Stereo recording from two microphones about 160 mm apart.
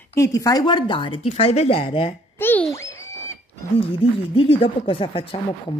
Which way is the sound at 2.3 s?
15° left (ahead or behind).